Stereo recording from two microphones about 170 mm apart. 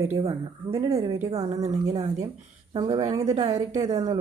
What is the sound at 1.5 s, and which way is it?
Speech, 40° right (ahead or behind).